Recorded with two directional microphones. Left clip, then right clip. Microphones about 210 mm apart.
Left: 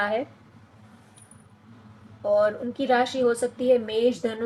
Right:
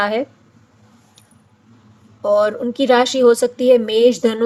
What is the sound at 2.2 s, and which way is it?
A woman's voice, 55° right (ahead or behind).